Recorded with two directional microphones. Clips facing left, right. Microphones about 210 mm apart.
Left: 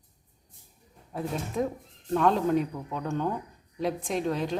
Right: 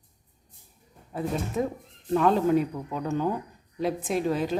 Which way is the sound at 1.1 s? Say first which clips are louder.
Right 2 dB; centre (ahead or behind).